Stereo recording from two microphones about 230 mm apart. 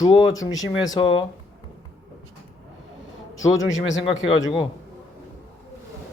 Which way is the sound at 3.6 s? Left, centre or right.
Left.